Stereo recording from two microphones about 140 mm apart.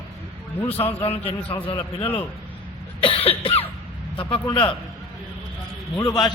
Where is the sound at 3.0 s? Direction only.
40° left (ahead or behind).